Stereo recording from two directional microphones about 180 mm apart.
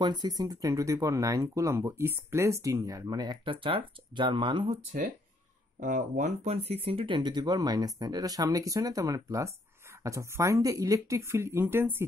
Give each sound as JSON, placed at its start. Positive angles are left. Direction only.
{"t": 0.0, "sound": "speech", "side_deg": -20}
{"t": 5.8, "sound": "speech", "side_deg": -45}